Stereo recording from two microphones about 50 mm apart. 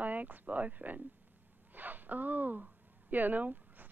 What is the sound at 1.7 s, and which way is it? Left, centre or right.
Speech, right.